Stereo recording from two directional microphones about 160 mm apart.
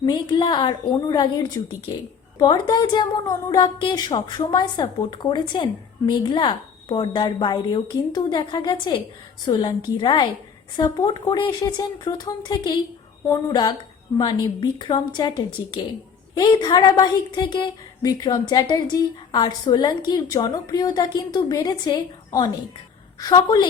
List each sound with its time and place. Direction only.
0.0 s a woman's voice: 25° left (ahead or behind)